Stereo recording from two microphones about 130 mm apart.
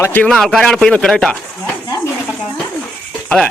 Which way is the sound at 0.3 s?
Centre (ahead or behind).